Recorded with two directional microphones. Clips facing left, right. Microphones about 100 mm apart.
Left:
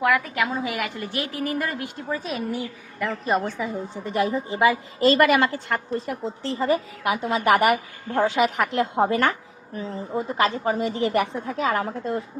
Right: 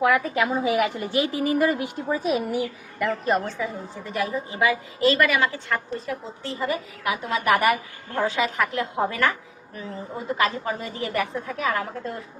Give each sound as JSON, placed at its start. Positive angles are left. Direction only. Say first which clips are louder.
{"t": 0.0, "sound": "a woman's voice", "louder": "right 1 dB", "side_deg": -20}
{"t": 3.0, "sound": "a woman's voice", "louder": "right 1 dB", "side_deg": 0}
{"t": 3.4, "sound": "a woman's voice", "louder": "left 2 dB", "side_deg": 20}
{"t": 5.2, "sound": "a woman's voice", "louder": "left 3 dB", "side_deg": 50}
{"t": 6.6, "sound": "a woman's voice", "louder": "left 5 dB", "side_deg": 30}